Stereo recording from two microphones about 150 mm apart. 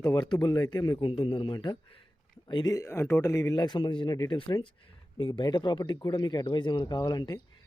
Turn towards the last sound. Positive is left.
turn(degrees=30)  # may be behind; listen again after turning